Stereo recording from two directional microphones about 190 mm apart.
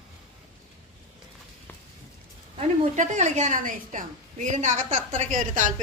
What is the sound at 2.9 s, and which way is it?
A woman's voice, 40° right (ahead or behind).